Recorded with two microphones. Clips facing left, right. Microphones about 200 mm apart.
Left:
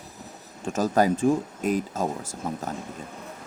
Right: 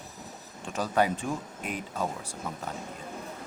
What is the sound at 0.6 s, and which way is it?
Speech, 45° left (ahead or behind).